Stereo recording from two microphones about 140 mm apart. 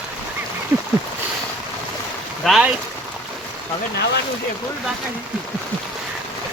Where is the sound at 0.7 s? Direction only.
15° right (ahead or behind).